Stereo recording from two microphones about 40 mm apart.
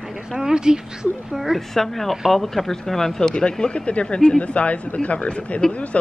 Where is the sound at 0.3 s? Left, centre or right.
Centre.